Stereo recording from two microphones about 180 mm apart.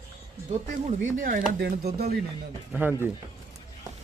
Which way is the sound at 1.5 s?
60° right (ahead or behind).